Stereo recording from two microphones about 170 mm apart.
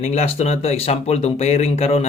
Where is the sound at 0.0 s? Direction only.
40° left (ahead or behind).